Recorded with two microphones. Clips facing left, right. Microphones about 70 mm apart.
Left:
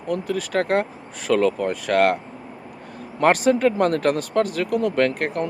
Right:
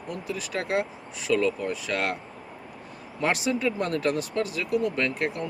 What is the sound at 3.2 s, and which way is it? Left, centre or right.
Speech, left.